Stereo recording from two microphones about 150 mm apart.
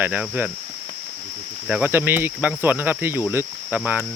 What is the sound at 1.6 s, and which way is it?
Cricket, 5° right (ahead or behind).